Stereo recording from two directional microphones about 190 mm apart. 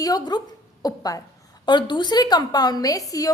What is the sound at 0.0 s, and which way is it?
A woman's voice, 20° left (ahead or behind).